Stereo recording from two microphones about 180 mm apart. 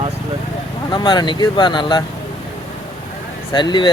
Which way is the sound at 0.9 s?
25° left (ahead or behind).